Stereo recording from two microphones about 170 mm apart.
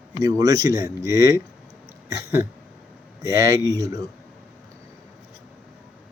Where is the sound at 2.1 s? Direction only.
20° right (ahead or behind).